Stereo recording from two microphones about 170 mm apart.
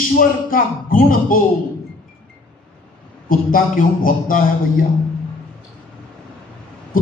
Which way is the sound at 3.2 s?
55° left (ahead or behind).